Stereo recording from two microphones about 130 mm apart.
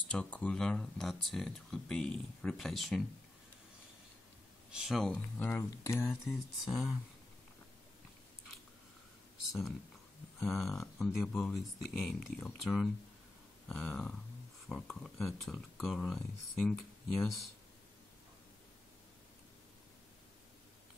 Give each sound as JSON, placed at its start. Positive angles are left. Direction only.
{"t": 0.1, "sound": "speech", "side_deg": 10}
{"t": 4.6, "sound": "speech", "side_deg": -5}
{"t": 5.4, "sound": "speech", "side_deg": 15}
{"t": 6.0, "sound": "speech", "side_deg": 0}
{"t": 9.5, "sound": "speech", "side_deg": 0}